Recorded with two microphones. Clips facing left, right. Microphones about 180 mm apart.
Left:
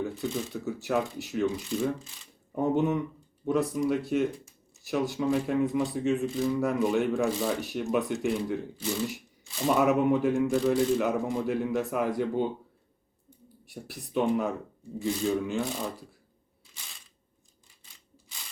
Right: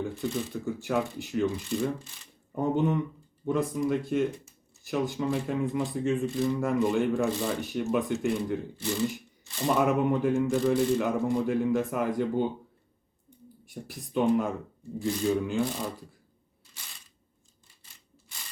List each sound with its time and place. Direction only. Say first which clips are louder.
0.0 s speech: even; 5° left (ahead or behind)
13.7 s speech: right 1 dB; centre (ahead or behind)